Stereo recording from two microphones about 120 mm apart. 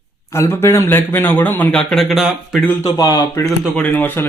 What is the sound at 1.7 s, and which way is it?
Speech, 5° left (ahead or behind).